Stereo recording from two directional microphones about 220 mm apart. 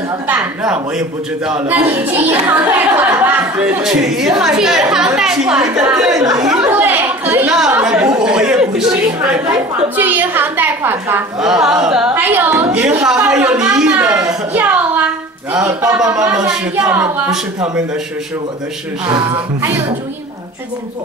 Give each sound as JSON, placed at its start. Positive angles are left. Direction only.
{"t": 0.3, "sound": "a man's voice", "side_deg": -5}
{"t": 14.2, "sound": "a sound", "side_deg": -10}
{"t": 15.5, "sound": "a woman's voice", "side_deg": -15}
{"t": 19.0, "sound": "a woman's voice", "side_deg": -15}